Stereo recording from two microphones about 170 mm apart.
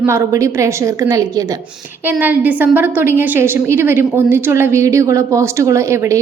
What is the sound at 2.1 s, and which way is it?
A woman's voice, 10° right (ahead or behind).